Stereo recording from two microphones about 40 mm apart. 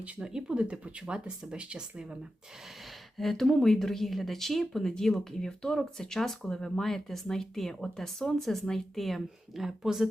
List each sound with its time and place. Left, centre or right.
0.2 s speech: right
3.2 s speech: centre
9.6 s speech: centre